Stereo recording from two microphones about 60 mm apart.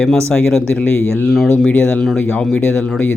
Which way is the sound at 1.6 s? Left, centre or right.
Centre.